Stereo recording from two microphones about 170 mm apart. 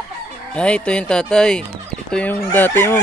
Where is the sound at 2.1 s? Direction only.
10° left (ahead or behind).